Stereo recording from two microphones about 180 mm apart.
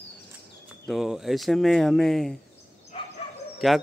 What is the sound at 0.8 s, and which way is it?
Speech, centre (ahead or behind).